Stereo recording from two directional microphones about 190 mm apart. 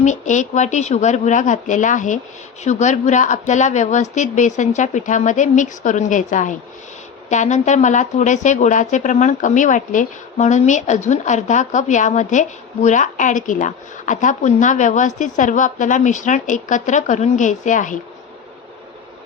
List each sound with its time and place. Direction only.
0.0 s speech: 40° left (ahead or behind)